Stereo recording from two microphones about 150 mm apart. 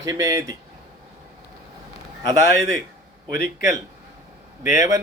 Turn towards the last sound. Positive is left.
turn(degrees=-20)  # may be behind; listen again after turning